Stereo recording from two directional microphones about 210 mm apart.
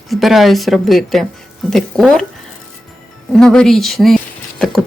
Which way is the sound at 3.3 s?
5° left (ahead or behind).